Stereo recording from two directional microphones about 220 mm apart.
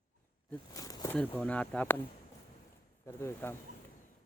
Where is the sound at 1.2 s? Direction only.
5° left (ahead or behind).